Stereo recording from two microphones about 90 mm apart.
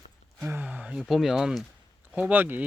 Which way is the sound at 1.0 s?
Centre (ahead or behind).